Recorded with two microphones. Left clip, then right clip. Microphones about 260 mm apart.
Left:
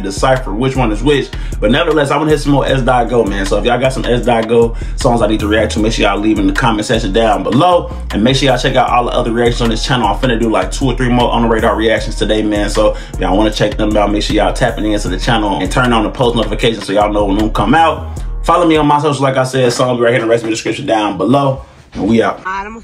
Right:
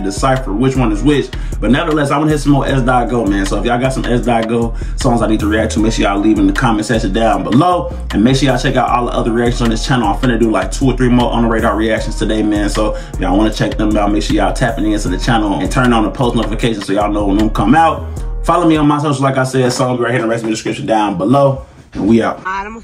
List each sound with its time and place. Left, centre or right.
0.2 s speech: centre